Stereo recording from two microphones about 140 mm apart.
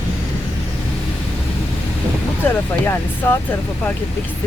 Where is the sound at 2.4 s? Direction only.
15° left (ahead or behind).